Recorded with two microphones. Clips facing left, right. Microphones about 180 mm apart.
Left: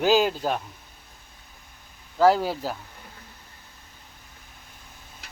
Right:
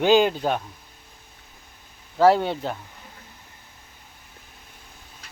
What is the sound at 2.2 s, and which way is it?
Speech, centre (ahead or behind).